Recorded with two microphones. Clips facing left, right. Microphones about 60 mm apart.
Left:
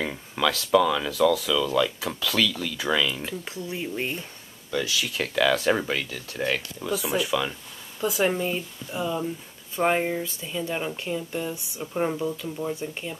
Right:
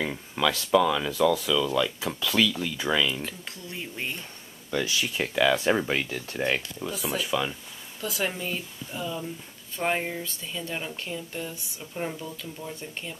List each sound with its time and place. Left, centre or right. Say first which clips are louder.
0.0 s speech: left 1 dB; centre
0.5 s speech: left 1 dB; centre
2.1 s speech: right 1 dB; centre
3.2 s speech: left 4 dB; centre
4.8 s speech: even; right
5.1 s speech: left 1 dB; centre
5.9 s speech: right 1 dB; right
6.3 s speech: left 1 dB; centre
8.0 s speech: left 6 dB; centre